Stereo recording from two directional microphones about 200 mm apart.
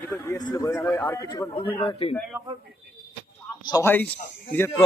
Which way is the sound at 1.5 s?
30° left (ahead or behind).